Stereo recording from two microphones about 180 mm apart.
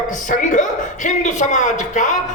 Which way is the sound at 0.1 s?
45° left (ahead or behind).